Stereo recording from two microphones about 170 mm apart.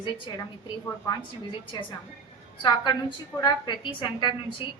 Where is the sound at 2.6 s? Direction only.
30° left (ahead or behind).